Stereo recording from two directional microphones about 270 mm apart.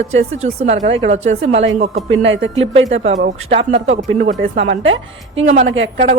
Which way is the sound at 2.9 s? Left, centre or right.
Right.